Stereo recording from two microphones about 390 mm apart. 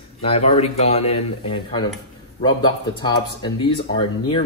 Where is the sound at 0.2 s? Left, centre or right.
Centre.